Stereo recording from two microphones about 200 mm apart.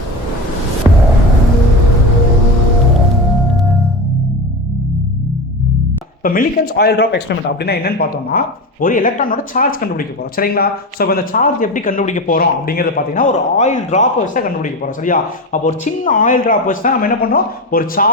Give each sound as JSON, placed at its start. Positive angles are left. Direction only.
{"t": 6.2, "sound": "speech", "side_deg": 45}